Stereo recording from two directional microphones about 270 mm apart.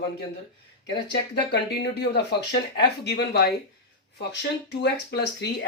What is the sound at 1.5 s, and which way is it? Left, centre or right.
Speech, left.